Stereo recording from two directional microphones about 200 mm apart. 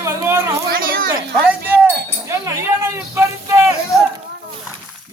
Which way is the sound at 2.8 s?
15° right (ahead or behind).